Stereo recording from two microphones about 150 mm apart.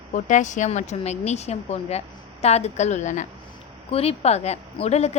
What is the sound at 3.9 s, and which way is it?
A woman's voice, 40° left (ahead or behind).